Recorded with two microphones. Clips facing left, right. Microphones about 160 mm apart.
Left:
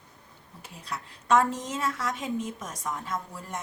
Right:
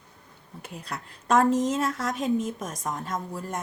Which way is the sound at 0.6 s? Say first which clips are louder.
Right 1 dB; 55° right (ahead or behind).